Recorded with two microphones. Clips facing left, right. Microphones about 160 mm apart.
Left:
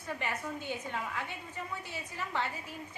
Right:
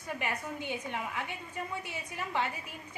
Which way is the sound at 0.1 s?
15° right (ahead or behind).